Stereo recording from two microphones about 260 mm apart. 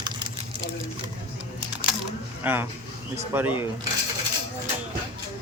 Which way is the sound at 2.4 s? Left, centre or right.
Centre.